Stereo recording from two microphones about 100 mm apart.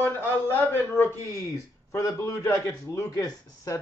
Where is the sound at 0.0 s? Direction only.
20° left (ahead or behind).